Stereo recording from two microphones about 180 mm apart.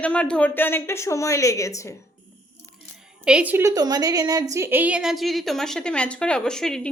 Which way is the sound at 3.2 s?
5° right (ahead or behind).